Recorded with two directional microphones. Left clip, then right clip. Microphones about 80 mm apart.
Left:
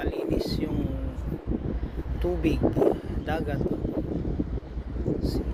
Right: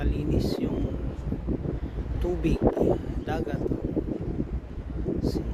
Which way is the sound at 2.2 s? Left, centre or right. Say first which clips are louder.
Left 2 dB; right.